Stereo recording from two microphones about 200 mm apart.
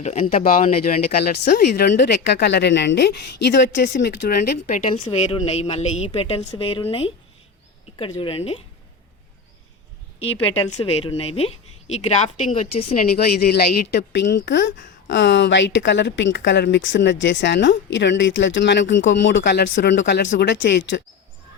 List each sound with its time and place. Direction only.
0.0 s a woman's voice: 35° left (ahead or behind)
0.4 s speech: 45° left (ahead or behind)
4.4 s a woman's voice: 40° left (ahead or behind)
5.0 s a woman's voice: 30° left (ahead or behind)
10.7 s a woman's voice: 30° left (ahead or behind)
13.1 s speech: 50° left (ahead or behind)